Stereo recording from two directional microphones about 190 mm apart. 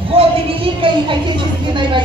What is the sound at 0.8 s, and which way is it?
Speech, 25° right (ahead or behind).